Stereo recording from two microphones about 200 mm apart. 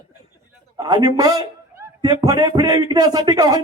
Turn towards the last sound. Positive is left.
turn(degrees=-20)  # may be behind; listen again after turning